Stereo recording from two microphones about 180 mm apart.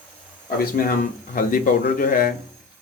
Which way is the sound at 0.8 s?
50° left (ahead or behind).